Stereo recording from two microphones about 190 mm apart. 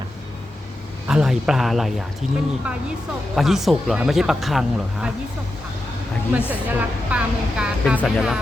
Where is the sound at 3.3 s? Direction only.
Centre (ahead or behind).